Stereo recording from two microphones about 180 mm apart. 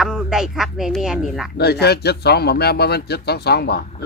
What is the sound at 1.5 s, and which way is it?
Speech, 65° left (ahead or behind).